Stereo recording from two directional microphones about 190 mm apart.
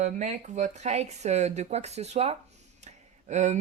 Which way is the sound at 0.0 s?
40° right (ahead or behind).